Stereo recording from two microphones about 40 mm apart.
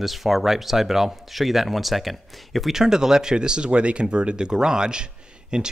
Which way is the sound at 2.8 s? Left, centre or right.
Centre.